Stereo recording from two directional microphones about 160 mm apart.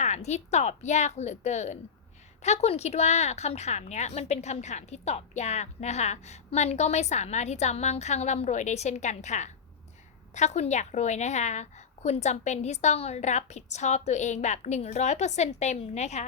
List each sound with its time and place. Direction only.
0.0 s a woman's voice: 45° left (ahead or behind)